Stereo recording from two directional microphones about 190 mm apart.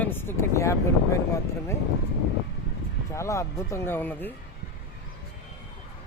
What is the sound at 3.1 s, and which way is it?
Speech, 15° left (ahead or behind).